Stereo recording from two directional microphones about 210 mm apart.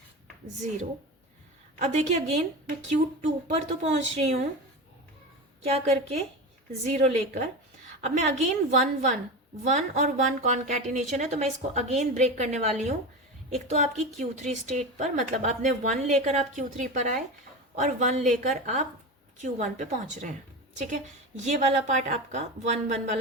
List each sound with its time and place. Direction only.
1.8 s speech: 35° right (ahead or behind)
5.6 s speech: 30° right (ahead or behind)